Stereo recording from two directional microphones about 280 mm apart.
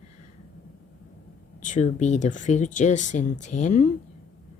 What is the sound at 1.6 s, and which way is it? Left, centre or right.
Speech, left.